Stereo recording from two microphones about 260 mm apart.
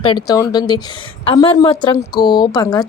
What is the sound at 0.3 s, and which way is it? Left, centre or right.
A woman's voice, centre.